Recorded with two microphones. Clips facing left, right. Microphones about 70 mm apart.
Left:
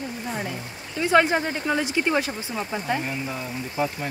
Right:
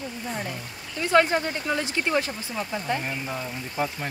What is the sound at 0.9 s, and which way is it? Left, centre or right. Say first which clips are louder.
Speech: left 1 dB; centre.